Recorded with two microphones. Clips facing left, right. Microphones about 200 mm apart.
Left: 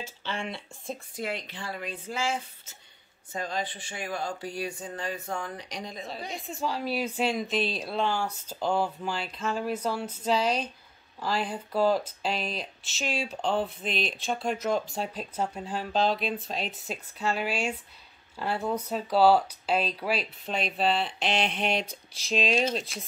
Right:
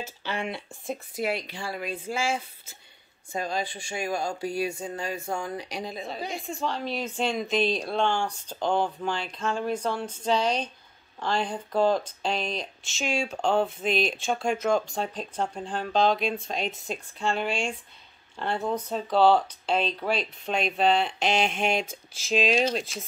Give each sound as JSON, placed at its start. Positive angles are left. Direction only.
{"t": 1.1, "sound": "speech", "side_deg": -10}
{"t": 21.5, "sound": "a sound", "side_deg": -45}
{"t": 22.1, "sound": "speech", "side_deg": 0}